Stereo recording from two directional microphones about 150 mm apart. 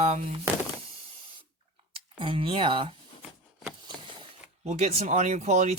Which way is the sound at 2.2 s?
35° right (ahead or behind).